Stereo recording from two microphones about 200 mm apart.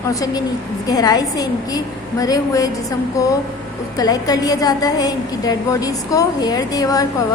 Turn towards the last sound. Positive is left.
turn(degrees=20)  # may be behind; listen again after turning